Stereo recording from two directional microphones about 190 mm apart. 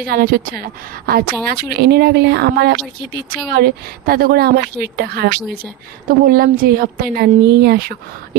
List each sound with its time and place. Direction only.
0.0 s a woman's voice: 50° right (ahead or behind)